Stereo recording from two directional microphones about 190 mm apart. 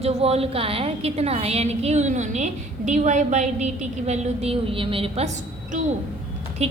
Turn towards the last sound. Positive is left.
turn(degrees=-35)  # may be behind; listen again after turning